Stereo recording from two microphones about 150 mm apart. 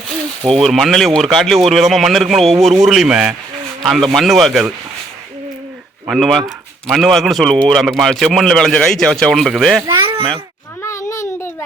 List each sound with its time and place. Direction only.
0.4 s speech: centre (ahead or behind)
6.1 s speech: centre (ahead or behind)
9.8 s a child's voice: 30° right (ahead or behind)
10.8 s a sound: 20° left (ahead or behind)